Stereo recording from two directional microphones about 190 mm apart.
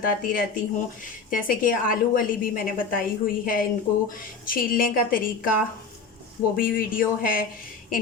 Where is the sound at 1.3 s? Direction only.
45° left (ahead or behind).